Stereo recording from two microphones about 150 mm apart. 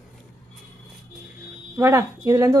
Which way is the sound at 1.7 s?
15° right (ahead or behind).